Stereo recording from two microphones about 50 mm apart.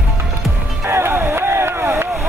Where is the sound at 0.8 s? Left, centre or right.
Right.